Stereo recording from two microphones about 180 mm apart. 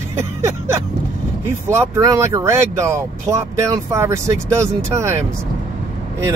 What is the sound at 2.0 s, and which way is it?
Speech, 15° right (ahead or behind).